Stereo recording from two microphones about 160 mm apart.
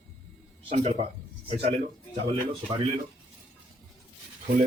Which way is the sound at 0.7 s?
40° right (ahead or behind).